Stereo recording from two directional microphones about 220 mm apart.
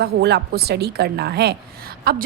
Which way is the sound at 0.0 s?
50° right (ahead or behind).